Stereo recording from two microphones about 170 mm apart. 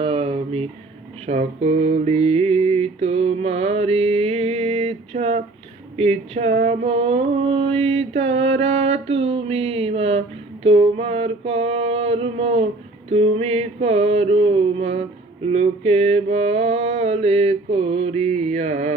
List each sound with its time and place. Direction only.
0.0 s a sound: 35° right (ahead or behind)
1.3 s mantra: 40° right (ahead or behind)
13.1 s music: 35° right (ahead or behind)
15.5 s mantra: 40° right (ahead or behind)